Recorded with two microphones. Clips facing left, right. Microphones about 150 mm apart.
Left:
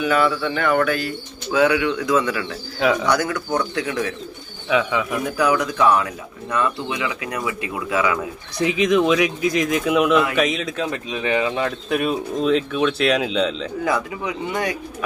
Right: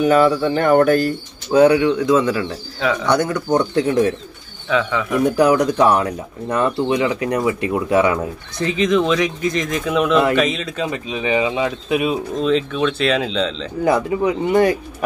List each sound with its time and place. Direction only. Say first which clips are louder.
0.0 s speech: right 5 dB; 40° right (ahead or behind)
2.8 s speech: left 1 dB; 15° left (ahead or behind)
3.1 s speech: right 4 dB; 30° right (ahead or behind)
4.6 s speech: right 1 dB; 10° left (ahead or behind)
5.2 s speech: right 8 dB; 35° right (ahead or behind)
8.5 s speech: even; 5° left (ahead or behind)
12.4 s speech: even; 5° left (ahead or behind)
13.8 s speech: right 8 dB; 30° right (ahead or behind)